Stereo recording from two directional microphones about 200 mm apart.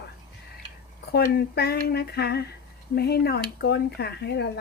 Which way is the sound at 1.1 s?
50° left (ahead or behind).